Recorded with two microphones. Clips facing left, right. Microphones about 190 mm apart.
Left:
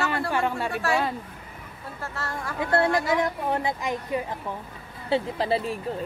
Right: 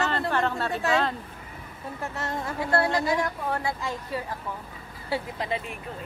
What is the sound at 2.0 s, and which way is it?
Speech, 20° right (ahead or behind).